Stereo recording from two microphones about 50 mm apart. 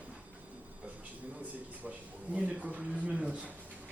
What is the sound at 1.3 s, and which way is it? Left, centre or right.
A man's voice, right.